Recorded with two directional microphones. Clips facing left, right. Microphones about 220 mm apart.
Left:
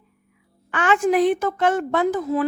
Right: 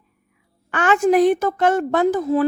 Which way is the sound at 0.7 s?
45° right (ahead or behind).